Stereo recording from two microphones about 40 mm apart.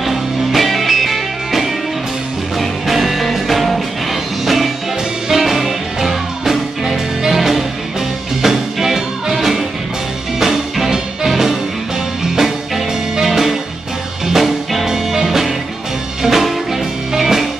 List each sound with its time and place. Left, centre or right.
0.0 s music: centre